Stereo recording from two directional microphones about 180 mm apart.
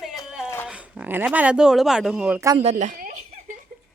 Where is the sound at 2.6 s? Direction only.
40° right (ahead or behind).